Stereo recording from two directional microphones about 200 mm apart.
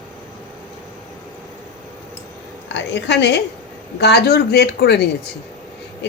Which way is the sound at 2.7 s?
60° left (ahead or behind).